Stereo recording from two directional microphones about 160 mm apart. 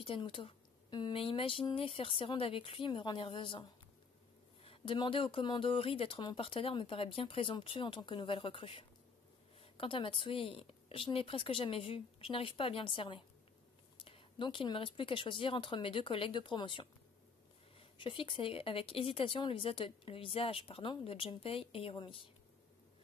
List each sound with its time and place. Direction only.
0.0 s speech: 35° left (ahead or behind)
4.6 s speech: 30° left (ahead or behind)